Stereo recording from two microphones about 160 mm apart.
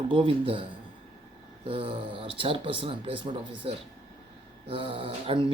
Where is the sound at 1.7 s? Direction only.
35° right (ahead or behind).